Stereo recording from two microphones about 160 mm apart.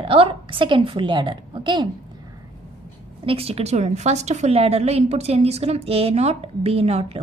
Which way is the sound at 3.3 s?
40° right (ahead or behind).